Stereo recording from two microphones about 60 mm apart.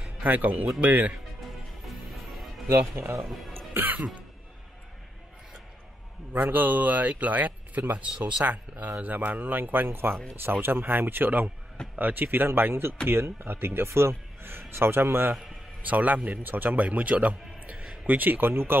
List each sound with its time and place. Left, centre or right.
0.2 s a man's voice: right
2.0 s music: centre
3.0 s speech: right
3.5 s cough: right
6.3 s a man's voice: right
15.8 s a man's voice: right